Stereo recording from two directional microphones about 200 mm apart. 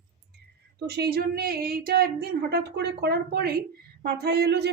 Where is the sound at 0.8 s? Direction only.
55° right (ahead or behind).